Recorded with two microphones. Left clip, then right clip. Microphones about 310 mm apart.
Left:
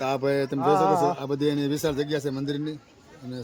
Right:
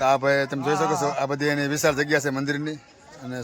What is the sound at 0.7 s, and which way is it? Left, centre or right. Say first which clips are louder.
Speech: left 2 dB; centre.